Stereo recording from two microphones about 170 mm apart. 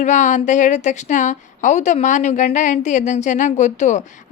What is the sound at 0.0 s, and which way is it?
A woman's voice, 45° left (ahead or behind).